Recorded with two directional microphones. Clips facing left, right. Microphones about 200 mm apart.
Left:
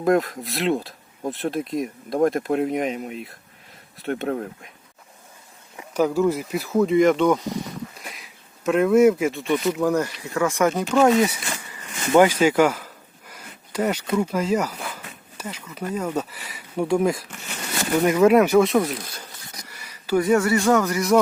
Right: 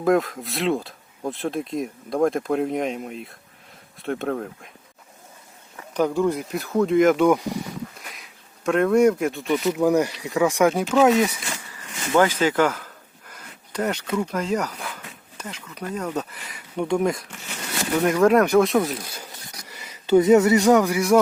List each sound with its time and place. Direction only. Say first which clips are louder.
0.0 s speech: even; centre (ahead or behind)
5.7 s speech: left 1 dB; 5° left (ahead or behind)
12.1 s speech: left 3 dB; 15° left (ahead or behind)
19.6 s speech: right 4 dB; 20° right (ahead or behind)